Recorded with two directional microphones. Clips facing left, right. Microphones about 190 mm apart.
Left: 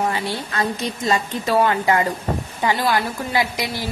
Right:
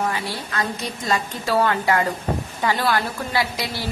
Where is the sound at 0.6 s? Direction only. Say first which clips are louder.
Left 3 dB; 20° left (ahead or behind).